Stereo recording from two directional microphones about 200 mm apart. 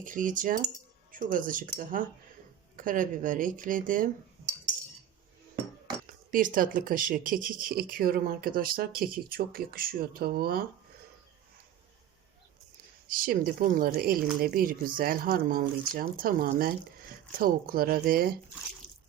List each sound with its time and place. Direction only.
0.0 s speech: 40° right (ahead or behind)
6.3 s speech: 40° right (ahead or behind)
13.1 s speech: 45° right (ahead or behind)
18.8 s drip: 70° left (ahead or behind)